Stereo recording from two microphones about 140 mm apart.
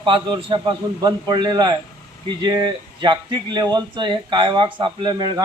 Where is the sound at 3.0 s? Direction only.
30° right (ahead or behind).